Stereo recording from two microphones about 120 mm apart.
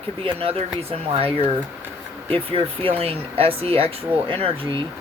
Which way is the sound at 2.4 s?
50° right (ahead or behind).